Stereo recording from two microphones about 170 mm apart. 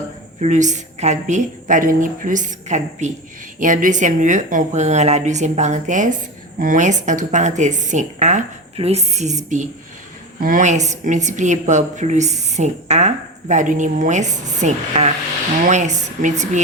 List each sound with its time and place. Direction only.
0.3 s a woman's voice: 45° right (ahead or behind)